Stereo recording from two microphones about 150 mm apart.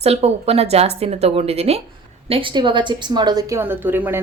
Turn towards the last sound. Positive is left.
turn(degrees=-15)  # may be behind; listen again after turning